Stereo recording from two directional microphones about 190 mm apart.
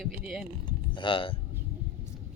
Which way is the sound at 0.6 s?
25° left (ahead or behind).